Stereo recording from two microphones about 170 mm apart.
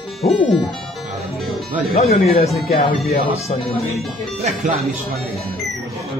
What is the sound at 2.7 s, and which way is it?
Speech, 35° left (ahead or behind).